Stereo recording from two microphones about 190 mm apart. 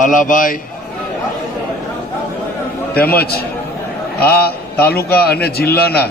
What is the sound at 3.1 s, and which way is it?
A man's voice, 55° left (ahead or behind).